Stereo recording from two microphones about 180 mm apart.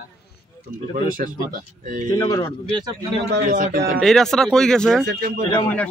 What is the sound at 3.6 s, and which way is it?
Speech, 50° right (ahead or behind).